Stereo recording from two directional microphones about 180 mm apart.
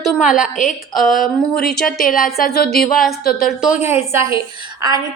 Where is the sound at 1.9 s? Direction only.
50° left (ahead or behind).